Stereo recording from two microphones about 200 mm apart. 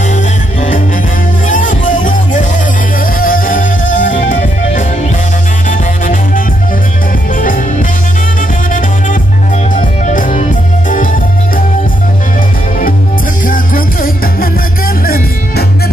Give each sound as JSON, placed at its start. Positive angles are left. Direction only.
{"t": 0.1, "sound": "music", "side_deg": 40}
{"t": 9.8, "sound": "music", "side_deg": 40}
{"t": 13.5, "sound": "music", "side_deg": 45}